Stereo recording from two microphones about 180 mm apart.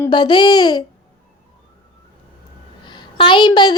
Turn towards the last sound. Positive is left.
turn(degrees=25)  # may be behind; listen again after turning